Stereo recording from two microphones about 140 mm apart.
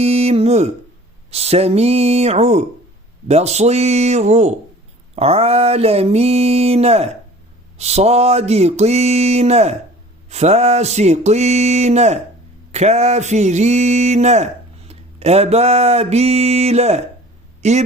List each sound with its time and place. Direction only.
0.0 s mantra: 45° right (ahead or behind)
17.6 s speech: 55° right (ahead or behind)